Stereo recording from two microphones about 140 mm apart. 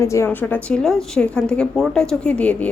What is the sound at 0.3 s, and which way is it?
A woman's voice, 10° left (ahead or behind).